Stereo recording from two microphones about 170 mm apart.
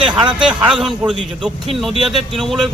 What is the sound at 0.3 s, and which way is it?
Speech, 5° right (ahead or behind).